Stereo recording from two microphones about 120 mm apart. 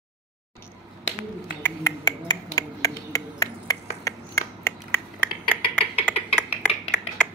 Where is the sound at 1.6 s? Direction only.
25° left (ahead or behind).